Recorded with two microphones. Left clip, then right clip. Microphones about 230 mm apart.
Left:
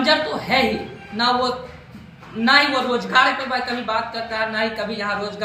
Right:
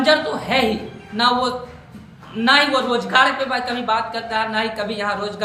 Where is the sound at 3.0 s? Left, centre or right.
Centre.